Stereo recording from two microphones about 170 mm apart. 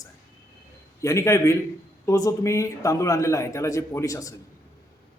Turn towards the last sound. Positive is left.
turn(degrees=20)  # may be behind; listen again after turning